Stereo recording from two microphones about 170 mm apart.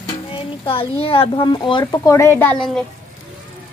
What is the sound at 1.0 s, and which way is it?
A woman's voice, 30° left (ahead or behind).